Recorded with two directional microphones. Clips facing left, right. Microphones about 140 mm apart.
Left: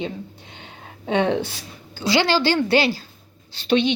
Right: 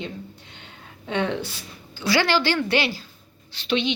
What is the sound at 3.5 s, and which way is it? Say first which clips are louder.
Speech: left 5 dB; 45° left (ahead or behind).